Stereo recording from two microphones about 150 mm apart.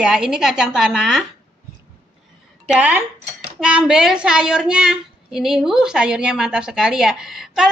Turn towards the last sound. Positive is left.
turn(degrees=-5)  # may be behind; listen again after turning